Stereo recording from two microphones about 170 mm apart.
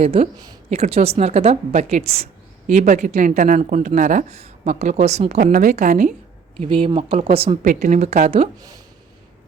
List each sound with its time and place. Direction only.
0.0 s speech: 40° right (ahead or behind)
6.6 s speech: 30° right (ahead or behind)
7.6 s speech: 50° right (ahead or behind)